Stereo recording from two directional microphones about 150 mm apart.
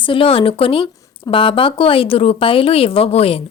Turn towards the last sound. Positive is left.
turn(degrees=40)  # may be behind; listen again after turning